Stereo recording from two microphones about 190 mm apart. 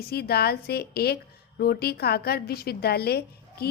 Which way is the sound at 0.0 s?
55° left (ahead or behind).